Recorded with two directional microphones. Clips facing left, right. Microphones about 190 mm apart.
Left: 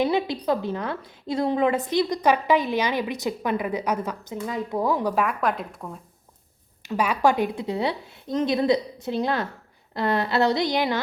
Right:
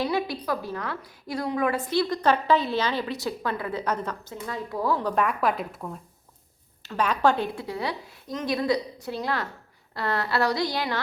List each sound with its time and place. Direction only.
0.0 s a woman's voice: 20° left (ahead or behind)
5.1 s a woman's voice: centre (ahead or behind)
6.8 s a woman's voice: 10° left (ahead or behind)